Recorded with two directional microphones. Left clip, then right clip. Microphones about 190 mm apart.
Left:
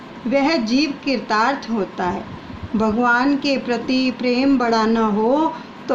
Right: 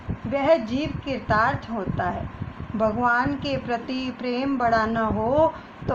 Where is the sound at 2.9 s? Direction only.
10° right (ahead or behind).